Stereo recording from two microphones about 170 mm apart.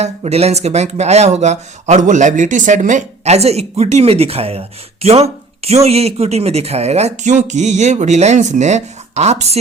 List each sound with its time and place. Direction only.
0.0 s speech: 40° right (ahead or behind)